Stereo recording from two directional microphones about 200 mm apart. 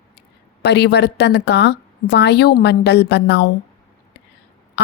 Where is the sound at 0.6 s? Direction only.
55° left (ahead or behind).